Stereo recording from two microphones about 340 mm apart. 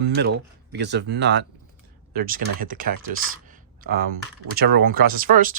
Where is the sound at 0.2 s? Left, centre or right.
Right.